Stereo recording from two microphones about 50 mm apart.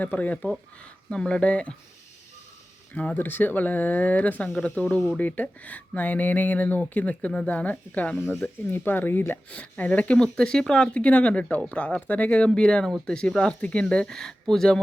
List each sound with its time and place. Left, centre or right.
0.0 s speech: left
0.8 s speech: centre
2.9 s speech: left
3.2 s speech: left
8.1 s speech: centre
8.4 s speech: left
9.5 s speech: left
10.3 s speech: centre
13.5 s speech: left